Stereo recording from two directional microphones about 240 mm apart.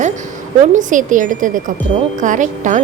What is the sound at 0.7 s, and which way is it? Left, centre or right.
Speech, right.